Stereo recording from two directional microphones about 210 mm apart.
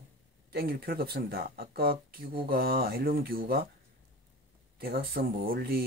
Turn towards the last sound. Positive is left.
turn(degrees=-45)  # may be behind; listen again after turning